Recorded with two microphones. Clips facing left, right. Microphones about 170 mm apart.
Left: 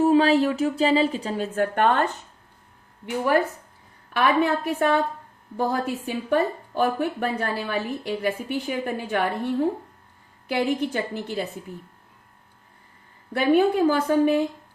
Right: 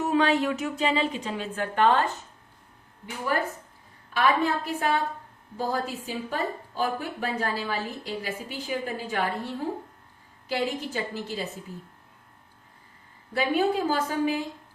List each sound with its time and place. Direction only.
0.0 s speech: 30° left (ahead or behind); by 2.0 s 55° left (ahead or behind)
4.1 s speech: 60° left (ahead or behind)
10.5 s speech: 60° left (ahead or behind)
13.3 s speech: 55° left (ahead or behind)